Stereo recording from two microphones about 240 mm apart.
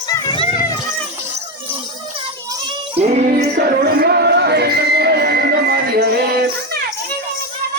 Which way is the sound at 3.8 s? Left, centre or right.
Right.